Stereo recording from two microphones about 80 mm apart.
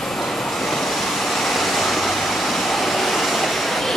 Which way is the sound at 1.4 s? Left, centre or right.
Centre.